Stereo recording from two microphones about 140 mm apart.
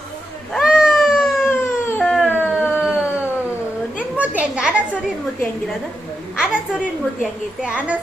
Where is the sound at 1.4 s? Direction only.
15° left (ahead or behind).